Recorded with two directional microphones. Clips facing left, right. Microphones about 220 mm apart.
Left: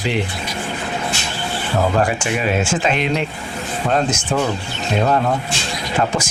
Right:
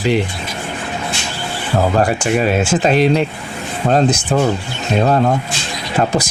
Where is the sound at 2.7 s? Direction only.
40° right (ahead or behind).